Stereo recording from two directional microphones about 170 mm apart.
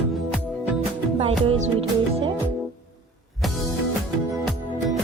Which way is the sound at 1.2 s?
35° right (ahead or behind).